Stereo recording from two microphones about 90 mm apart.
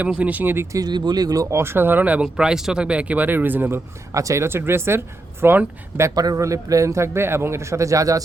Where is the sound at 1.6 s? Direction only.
25° right (ahead or behind).